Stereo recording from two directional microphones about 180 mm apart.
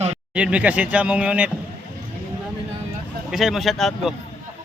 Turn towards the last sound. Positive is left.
turn(degrees=0)  # may be behind; listen again after turning